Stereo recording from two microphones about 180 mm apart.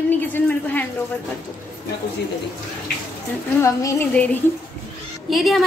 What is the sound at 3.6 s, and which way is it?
A woman's voice, 15° left (ahead or behind).